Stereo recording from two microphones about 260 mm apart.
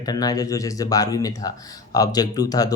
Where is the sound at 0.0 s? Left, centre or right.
Centre.